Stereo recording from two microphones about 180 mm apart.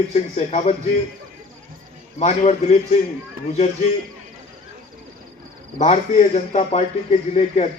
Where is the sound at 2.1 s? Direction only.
35° left (ahead or behind).